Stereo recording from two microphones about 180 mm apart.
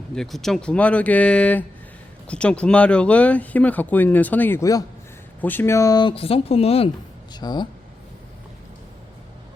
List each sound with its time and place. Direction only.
0.1 s speech: centre (ahead or behind); by 6.9 s 35° left (ahead or behind)
7.3 s speech: 25° left (ahead or behind)